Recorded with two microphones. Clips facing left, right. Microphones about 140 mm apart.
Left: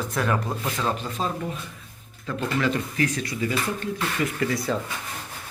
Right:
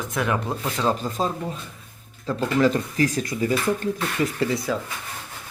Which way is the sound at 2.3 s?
35° right (ahead or behind).